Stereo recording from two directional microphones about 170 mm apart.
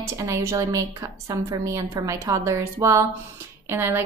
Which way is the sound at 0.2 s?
15° right (ahead or behind).